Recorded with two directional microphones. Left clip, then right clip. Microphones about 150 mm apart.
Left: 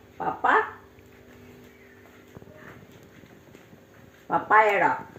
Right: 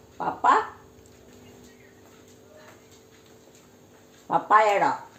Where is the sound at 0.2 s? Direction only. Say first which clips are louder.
Even; 20° right (ahead or behind).